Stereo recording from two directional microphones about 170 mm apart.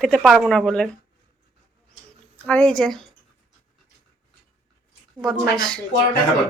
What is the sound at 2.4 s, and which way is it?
Speech, 5° left (ahead or behind).